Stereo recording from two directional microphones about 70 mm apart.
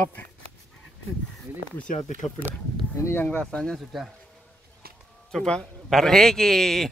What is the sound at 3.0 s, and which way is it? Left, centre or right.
Speech, left.